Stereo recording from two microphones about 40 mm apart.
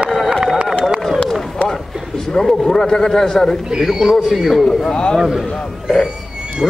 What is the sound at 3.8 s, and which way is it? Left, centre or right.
Speech, centre.